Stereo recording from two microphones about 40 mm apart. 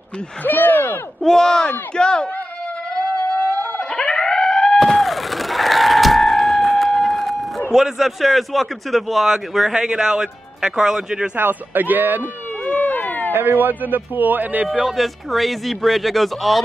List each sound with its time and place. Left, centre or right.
0.4 s speech: left
1.2 s speech: centre
3.9 s a sound: left; by 7.6 s centre
7.7 s speech: centre
9.8 s speech: centre
11.3 s a man's voice: right
12.6 s police car: left
13.3 s a man's voice: right
14.9 s speech: centre